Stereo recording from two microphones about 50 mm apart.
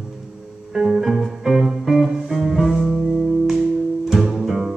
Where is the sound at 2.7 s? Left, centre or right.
Centre.